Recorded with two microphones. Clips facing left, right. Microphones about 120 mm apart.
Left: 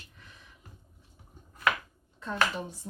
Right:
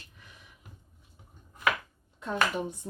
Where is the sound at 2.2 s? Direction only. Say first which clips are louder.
Right 1 dB; 15° right (ahead or behind).